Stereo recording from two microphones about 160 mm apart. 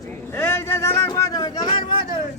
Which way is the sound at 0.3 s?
15° left (ahead or behind).